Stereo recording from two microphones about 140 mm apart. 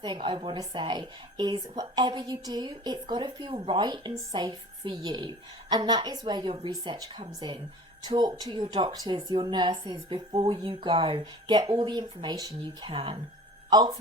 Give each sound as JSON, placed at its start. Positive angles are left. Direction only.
{"t": 0.0, "sound": "speech", "side_deg": -35}